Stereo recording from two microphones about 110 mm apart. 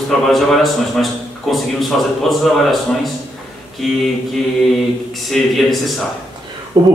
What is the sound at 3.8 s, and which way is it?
Speech, centre (ahead or behind).